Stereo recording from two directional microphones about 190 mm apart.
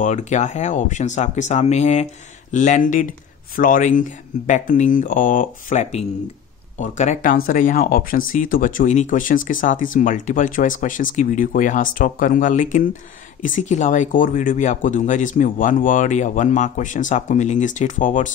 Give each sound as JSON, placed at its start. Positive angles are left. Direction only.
{"t": 0.0, "sound": "speech", "side_deg": 40}